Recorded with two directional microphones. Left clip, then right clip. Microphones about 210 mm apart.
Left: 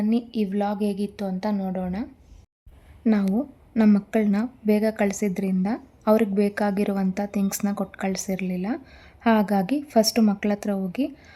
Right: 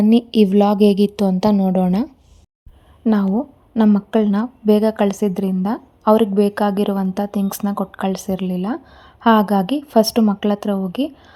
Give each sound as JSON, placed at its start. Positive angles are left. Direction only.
{"t": 0.1, "sound": "a woman's voice", "side_deg": -40}
{"t": 3.1, "sound": "a woman's voice", "side_deg": -10}